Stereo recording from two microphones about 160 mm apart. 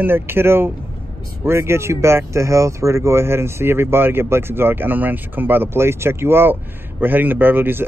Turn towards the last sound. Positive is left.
turn(degrees=-15)  # may be behind; listen again after turning